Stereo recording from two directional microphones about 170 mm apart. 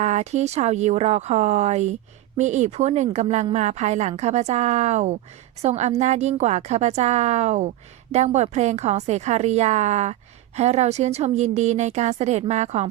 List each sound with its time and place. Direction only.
0.0 s a woman's voice: 40° right (ahead or behind)